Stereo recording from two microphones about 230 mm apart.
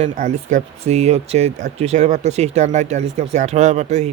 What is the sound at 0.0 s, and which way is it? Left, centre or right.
Speech, right.